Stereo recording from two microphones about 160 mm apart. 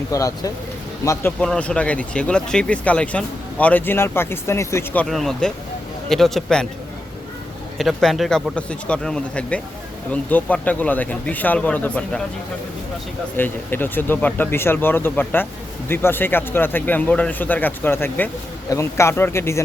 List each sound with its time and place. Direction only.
0.1 s speech: 20° left (ahead or behind)
1.4 s speech: 5° left (ahead or behind)
5.0 s speech: centre (ahead or behind)
7.8 s speech: centre (ahead or behind)
13.3 s speech: 10° left (ahead or behind)